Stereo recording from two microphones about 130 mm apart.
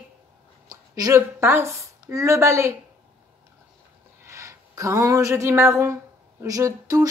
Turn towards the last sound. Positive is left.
turn(degrees=-25)  # may be behind; listen again after turning